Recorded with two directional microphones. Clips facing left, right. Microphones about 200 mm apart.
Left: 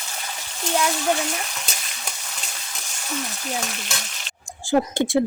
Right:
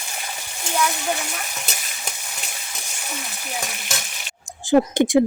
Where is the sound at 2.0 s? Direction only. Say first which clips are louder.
Right 1 dB; 10° right (ahead or behind).